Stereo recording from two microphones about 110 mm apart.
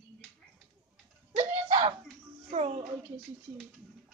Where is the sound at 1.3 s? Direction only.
65° right (ahead or behind).